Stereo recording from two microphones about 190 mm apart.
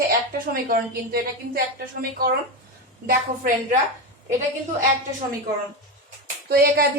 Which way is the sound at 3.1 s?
45° right (ahead or behind).